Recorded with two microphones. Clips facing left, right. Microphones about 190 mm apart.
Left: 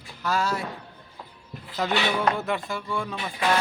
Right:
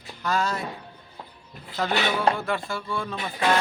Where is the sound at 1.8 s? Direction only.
10° left (ahead or behind).